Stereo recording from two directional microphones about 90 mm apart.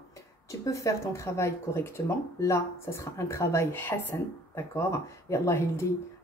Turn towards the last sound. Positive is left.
turn(degrees=30)  # may be behind; listen again after turning